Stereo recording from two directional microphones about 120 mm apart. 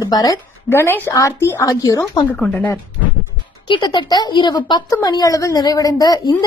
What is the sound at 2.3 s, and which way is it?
Speech, 10° left (ahead or behind).